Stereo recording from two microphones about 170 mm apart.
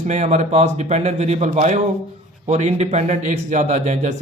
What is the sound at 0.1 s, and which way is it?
Speech, 45° right (ahead or behind).